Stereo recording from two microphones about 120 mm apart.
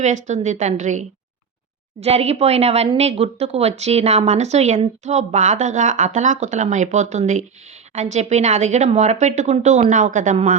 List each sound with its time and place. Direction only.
0.0 s a woman's voice: 80° right
2.0 s speech: 60° right (ahead or behind); by 10.6 s 90° right